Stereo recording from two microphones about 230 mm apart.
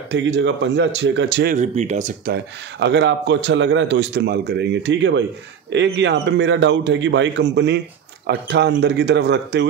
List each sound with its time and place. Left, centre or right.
0.1 s a man's voice: right
1.5 s speech: right
2.3 s a man's voice: right